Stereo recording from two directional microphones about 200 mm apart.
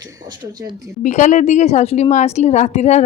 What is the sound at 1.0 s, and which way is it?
A woman's voice, 35° left (ahead or behind).